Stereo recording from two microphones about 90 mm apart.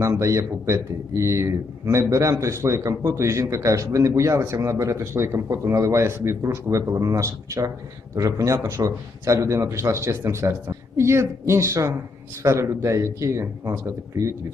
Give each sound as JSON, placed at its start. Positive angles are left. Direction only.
{"t": 0.0, "sound": "speech", "side_deg": -35}